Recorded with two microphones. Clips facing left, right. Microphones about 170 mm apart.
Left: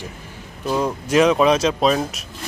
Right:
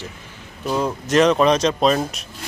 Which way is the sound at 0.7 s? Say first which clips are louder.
Even; 5° left (ahead or behind).